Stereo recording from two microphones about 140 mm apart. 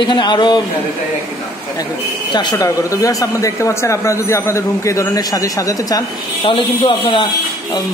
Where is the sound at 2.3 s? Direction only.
30° left (ahead or behind).